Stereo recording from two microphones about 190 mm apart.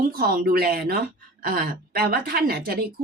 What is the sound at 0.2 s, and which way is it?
Speech, 50° right (ahead or behind).